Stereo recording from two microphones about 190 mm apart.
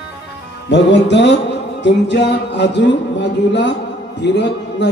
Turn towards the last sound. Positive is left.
turn(degrees=65)  # may be behind; listen again after turning